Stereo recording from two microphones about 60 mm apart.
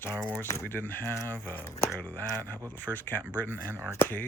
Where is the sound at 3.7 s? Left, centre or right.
Right.